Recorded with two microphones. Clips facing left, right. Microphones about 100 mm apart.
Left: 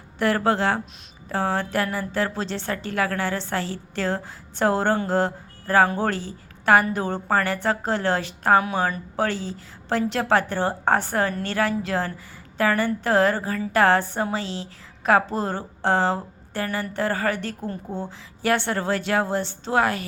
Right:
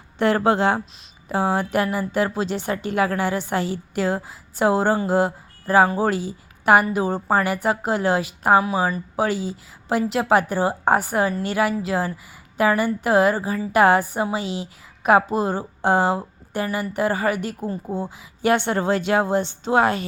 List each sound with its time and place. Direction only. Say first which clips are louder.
0.2 s a woman's voice: right 3 dB; 20° right (ahead or behind)